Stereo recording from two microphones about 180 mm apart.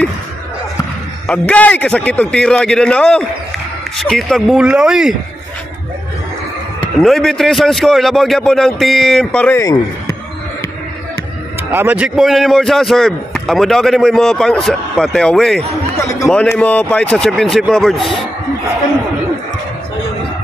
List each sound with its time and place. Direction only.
1.2 s a man's voice: 5° left (ahead or behind)
7.0 s a man's voice: centre (ahead or behind); by 10.1 s 20° left (ahead or behind)
11.7 s a man's voice: 10° right (ahead or behind)